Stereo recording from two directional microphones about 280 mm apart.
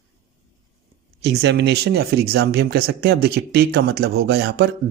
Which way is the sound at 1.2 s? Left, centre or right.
Right.